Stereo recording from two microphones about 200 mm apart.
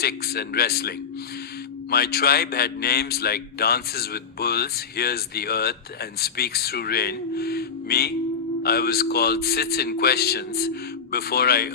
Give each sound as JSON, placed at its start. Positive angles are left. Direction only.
{"t": 0.0, "sound": "a man's voice", "side_deg": 50}